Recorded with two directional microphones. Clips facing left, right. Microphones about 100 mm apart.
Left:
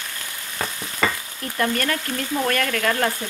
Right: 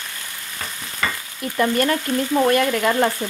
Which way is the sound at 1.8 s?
20° right (ahead or behind).